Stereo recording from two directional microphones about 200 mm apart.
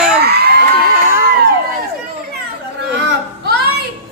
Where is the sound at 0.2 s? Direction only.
55° right (ahead or behind).